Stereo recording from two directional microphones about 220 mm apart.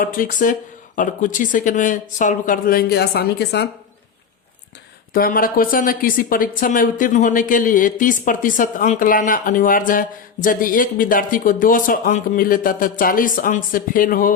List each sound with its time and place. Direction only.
0.0 s a woman's voice: 40° left (ahead or behind)
5.1 s a woman's voice: 40° left (ahead or behind)